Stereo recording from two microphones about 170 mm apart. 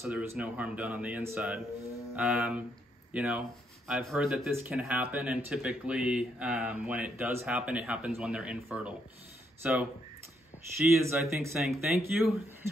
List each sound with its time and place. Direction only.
0.0 s speech: 10° right (ahead or behind)
4.5 s speech: 10° right (ahead or behind)